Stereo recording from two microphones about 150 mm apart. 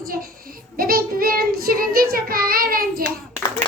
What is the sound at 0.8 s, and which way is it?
Child singing, 80° right.